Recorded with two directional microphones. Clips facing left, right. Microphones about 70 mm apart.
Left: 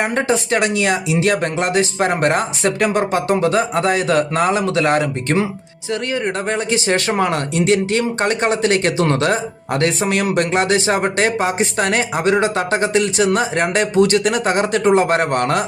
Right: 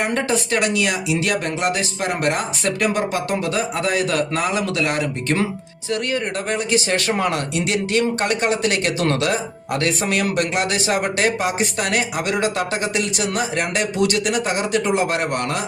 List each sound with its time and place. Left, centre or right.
0.0 s speech: left